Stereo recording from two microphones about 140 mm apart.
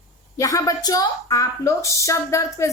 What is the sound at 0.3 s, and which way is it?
A woman's voice, 25° left (ahead or behind).